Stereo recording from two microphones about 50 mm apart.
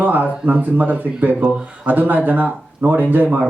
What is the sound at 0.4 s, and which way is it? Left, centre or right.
Speech, right.